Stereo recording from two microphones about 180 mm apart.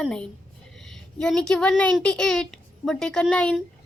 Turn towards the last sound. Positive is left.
turn(degrees=5)  # may be behind; listen again after turning